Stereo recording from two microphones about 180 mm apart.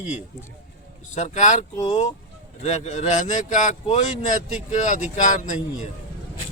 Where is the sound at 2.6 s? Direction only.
40° left (ahead or behind).